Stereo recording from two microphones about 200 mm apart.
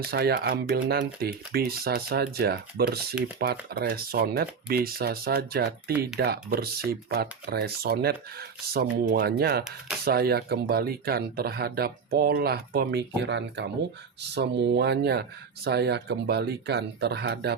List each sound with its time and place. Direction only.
0.0 s speech: 50° right (ahead or behind)